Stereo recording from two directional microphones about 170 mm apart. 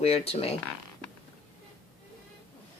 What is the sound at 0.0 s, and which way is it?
Speech, 35° left (ahead or behind).